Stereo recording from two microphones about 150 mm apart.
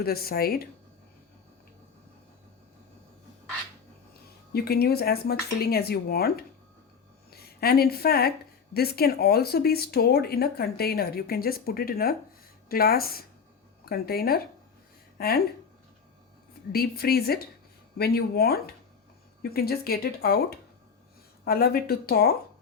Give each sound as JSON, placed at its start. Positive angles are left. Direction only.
{"t": 0.0, "sound": "speech", "side_deg": 90}
{"t": 4.5, "sound": "speech", "side_deg": 90}
{"t": 16.7, "sound": "speech", "side_deg": 90}
{"t": 21.4, "sound": "speech", "side_deg": 90}